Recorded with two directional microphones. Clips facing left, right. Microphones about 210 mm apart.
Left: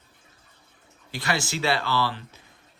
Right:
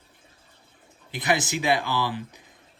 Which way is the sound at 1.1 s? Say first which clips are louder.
Right 3 dB; 20° right (ahead or behind).